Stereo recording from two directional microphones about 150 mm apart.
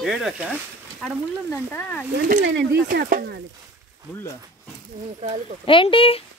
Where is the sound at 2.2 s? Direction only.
75° right (ahead or behind).